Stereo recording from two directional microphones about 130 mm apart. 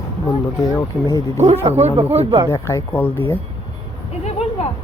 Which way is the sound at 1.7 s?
55° right (ahead or behind).